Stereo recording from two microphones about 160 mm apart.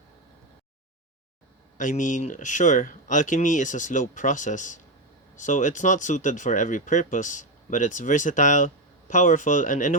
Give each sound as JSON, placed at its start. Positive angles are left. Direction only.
{"t": 1.8, "sound": "speech", "side_deg": 55}